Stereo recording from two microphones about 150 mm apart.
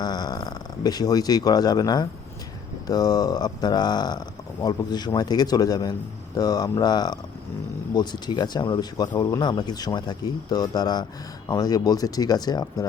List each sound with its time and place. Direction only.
0.0 s speech: 25° left (ahead or behind)